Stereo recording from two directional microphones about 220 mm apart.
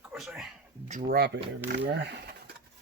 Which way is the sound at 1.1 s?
45° right (ahead or behind).